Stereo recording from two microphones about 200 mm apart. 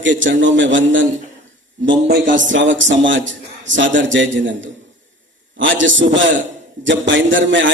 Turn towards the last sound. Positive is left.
turn(degrees=-65)  # may be behind; listen again after turning